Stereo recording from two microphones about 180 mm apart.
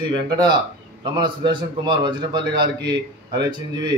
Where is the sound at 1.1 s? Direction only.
25° right (ahead or behind).